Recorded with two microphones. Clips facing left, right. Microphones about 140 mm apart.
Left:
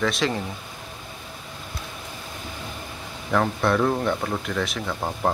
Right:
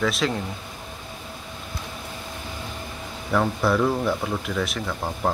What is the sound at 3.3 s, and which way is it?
Speech, centre (ahead or behind).